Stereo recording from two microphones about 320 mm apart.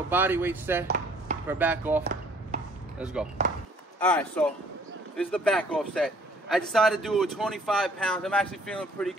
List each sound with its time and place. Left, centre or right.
0.1 s speech: centre
0.8 s chopping: right
1.5 s speech: centre
2.5 s chopping: right
3.0 s speech: centre